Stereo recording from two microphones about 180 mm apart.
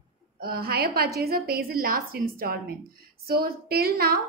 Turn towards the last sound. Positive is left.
turn(degrees=-55)  # may be behind; listen again after turning